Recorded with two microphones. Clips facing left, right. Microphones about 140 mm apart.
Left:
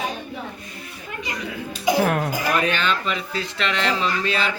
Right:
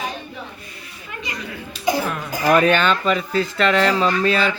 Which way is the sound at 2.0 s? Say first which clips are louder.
Left 5 dB; 50° left (ahead or behind).